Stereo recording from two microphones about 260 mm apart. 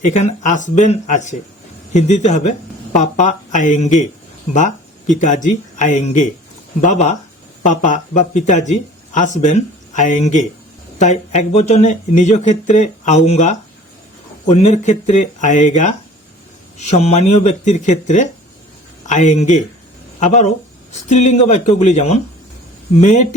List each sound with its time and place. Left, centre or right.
0.0 s speech: left